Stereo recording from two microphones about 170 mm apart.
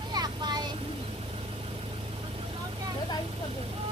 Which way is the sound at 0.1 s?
25° right (ahead or behind).